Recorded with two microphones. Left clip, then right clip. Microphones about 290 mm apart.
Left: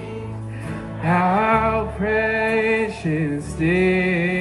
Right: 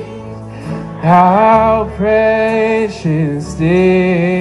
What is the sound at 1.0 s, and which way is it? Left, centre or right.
Music, right.